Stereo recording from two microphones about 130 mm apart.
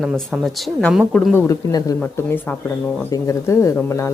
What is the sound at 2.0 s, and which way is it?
Speech, 10° left (ahead or behind).